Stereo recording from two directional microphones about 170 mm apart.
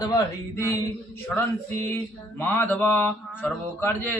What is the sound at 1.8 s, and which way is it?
Mantra, 10° left (ahead or behind).